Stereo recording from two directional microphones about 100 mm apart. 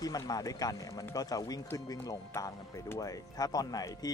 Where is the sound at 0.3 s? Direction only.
40° left (ahead or behind).